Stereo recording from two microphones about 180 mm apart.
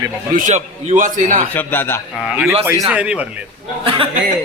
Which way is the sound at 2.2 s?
10° right (ahead or behind).